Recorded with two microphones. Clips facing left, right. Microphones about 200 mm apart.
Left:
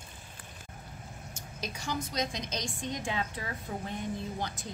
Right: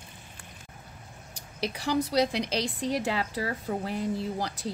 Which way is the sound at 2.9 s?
85° right.